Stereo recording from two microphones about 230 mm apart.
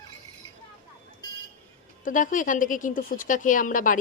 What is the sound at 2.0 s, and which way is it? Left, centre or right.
Speech, left.